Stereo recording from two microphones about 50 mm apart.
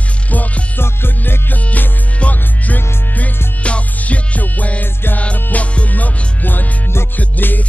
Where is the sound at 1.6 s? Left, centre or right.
Left.